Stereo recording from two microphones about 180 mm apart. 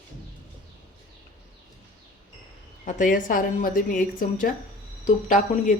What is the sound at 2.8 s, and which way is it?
A woman's voice, 45° left (ahead or behind).